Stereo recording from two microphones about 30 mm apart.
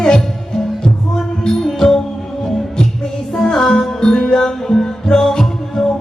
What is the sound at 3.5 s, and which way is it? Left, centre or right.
Music, centre.